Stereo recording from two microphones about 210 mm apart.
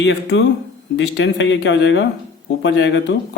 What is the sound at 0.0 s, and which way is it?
Speech, 60° left (ahead or behind).